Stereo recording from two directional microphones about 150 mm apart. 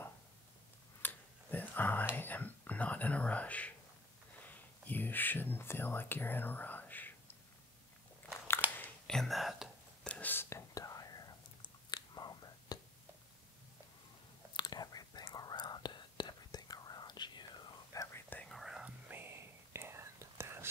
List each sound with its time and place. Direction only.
1.0 s a sound: 10° left (ahead or behind)
2.1 s whispering: 10° left (ahead or behind)
4.6 s speech: 10° left (ahead or behind)
8.7 s whispering: 5° left (ahead or behind); by 12.7 s 25° left (ahead or behind)
14.6 s whispering: 25° left (ahead or behind)
17.9 s whispering: 15° left (ahead or behind)
18.5 s whispering: centre (ahead or behind); by 20.6 s 15° right (ahead or behind)